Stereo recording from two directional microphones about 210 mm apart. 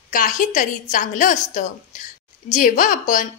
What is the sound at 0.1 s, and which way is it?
A woman's voice, 40° left (ahead or behind).